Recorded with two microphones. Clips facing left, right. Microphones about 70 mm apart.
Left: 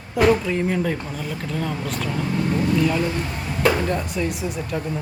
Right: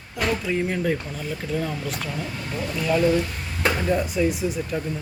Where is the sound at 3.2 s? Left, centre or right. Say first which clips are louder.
Left 5 dB; left.